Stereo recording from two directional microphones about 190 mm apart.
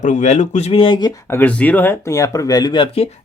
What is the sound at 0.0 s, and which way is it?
Speech, 40° left (ahead or behind).